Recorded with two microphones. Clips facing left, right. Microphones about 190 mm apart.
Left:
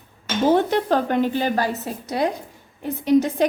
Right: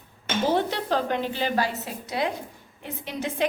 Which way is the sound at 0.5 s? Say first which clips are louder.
Left 6 dB; 50° left (ahead or behind).